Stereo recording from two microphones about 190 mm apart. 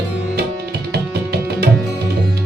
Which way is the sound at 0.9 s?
60° right (ahead or behind).